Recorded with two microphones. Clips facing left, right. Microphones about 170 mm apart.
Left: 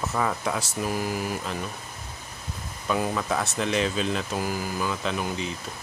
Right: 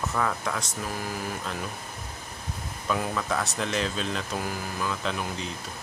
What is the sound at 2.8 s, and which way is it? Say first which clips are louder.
Speech: left 2 dB; 5° left (ahead or behind).